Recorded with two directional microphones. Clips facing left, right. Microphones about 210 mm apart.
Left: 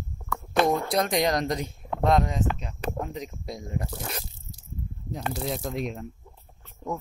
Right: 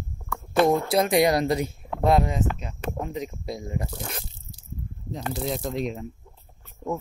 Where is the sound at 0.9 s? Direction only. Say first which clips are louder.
Right 4 dB; 5° right (ahead or behind).